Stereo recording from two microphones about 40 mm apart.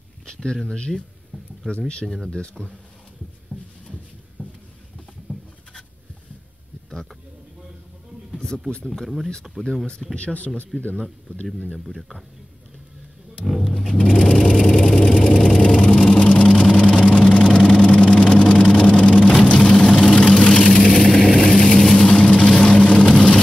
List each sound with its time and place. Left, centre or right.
0.3 s speech: left
0.9 s speech: right
1.8 s speech: left
2.0 s speech: centre
3.5 s a sound: left
5.3 s patter: right
8.3 s a sound: centre
8.8 s speech: centre
10.1 s speech: left
10.8 s speech: left
11.7 s speech: centre
13.5 s a sound: centre
13.9 s vehicle: left
19.6 s vehicle: centre